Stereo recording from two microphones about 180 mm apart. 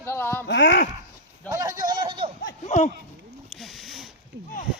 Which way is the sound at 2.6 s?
40° left (ahead or behind).